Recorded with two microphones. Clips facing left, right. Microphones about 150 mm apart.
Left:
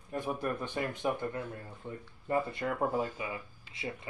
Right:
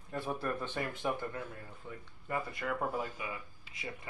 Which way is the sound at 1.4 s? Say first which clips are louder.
Left 4 dB; 30° left (ahead or behind).